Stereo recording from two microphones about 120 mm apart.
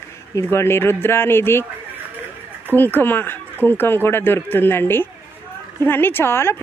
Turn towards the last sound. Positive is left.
turn(degrees=20)  # may be behind; listen again after turning